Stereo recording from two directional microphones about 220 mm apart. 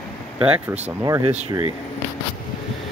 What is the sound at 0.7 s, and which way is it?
Speech, 10° right (ahead or behind).